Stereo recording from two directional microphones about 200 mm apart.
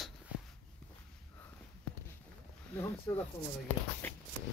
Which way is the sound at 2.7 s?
10° left (ahead or behind).